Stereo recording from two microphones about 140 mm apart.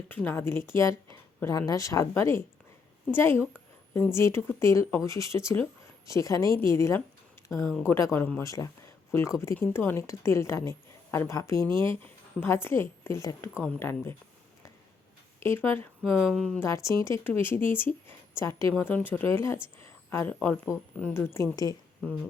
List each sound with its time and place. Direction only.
0.1 s a woman's voice: 15° left (ahead or behind)
15.4 s a woman's voice: 15° left (ahead or behind)
16.2 s speech: centre (ahead or behind)
16.6 s a woman's voice: 20° left (ahead or behind)